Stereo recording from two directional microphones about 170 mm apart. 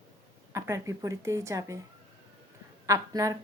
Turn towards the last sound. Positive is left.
turn(degrees=-20)  # may be behind; listen again after turning